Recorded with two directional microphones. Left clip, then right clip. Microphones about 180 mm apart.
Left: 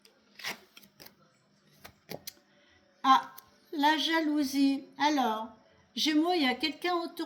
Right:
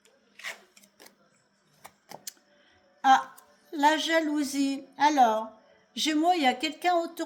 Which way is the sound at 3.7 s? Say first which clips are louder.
Right 3 dB; 45° right (ahead or behind).